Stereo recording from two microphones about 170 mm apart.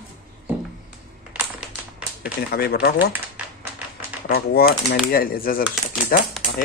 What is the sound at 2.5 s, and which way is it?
Speech, 65° left (ahead or behind).